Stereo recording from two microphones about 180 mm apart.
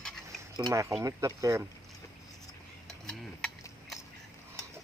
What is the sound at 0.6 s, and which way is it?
Speech, 15° right (ahead or behind).